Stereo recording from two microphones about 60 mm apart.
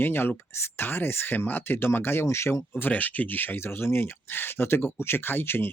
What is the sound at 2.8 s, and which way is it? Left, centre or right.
Speech, left.